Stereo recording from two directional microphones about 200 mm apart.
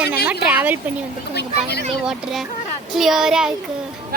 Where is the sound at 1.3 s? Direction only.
55° left (ahead or behind).